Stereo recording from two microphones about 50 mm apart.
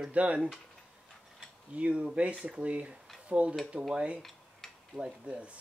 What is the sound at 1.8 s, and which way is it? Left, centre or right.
Speech, right.